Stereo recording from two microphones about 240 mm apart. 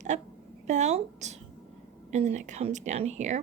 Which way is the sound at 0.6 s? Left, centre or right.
Right.